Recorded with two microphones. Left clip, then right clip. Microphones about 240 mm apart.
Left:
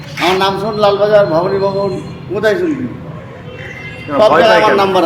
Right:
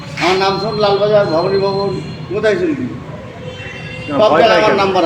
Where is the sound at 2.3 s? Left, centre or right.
Centre.